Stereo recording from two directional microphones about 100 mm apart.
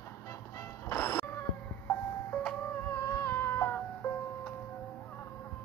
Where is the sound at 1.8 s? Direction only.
15° left (ahead or behind).